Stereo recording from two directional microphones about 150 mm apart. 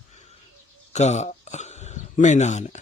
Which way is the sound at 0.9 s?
50° left (ahead or behind).